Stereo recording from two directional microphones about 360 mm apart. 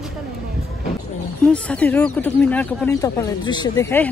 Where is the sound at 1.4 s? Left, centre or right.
Centre.